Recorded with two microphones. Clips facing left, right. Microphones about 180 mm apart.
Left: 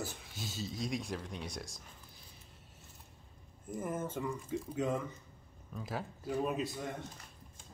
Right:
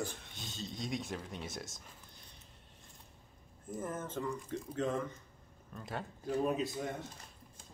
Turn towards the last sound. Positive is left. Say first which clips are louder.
# right 2 dB
turn(degrees=0)  # may be behind; listen again after turning